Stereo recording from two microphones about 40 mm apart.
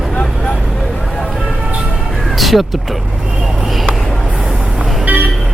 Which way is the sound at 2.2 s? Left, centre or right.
Centre.